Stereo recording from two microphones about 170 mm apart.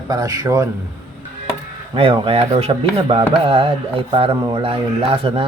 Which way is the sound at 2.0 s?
30° right (ahead or behind).